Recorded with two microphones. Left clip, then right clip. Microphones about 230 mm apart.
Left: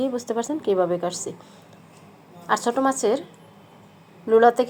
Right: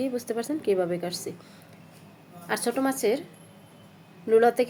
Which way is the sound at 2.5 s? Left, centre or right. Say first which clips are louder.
Left 6 dB; centre.